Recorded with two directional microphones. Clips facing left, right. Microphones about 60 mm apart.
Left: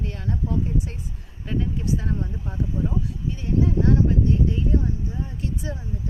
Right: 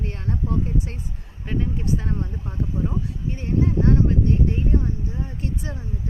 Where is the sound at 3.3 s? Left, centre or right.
Right.